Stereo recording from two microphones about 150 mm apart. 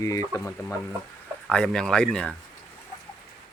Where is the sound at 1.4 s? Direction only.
5° left (ahead or behind).